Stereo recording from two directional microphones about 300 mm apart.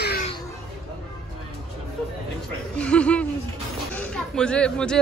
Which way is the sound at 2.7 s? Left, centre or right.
Centre.